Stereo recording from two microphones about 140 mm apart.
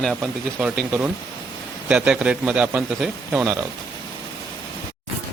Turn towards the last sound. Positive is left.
turn(degrees=-5)  # may be behind; listen again after turning